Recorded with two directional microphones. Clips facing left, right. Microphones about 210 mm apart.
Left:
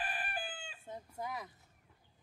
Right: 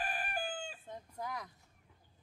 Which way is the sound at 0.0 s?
45° right (ahead or behind).